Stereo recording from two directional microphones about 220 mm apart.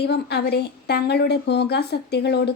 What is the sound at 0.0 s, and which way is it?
A woman's voice, 45° left (ahead or behind).